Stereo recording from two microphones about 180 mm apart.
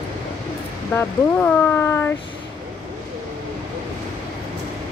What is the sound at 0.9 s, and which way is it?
Speech, 10° left (ahead or behind).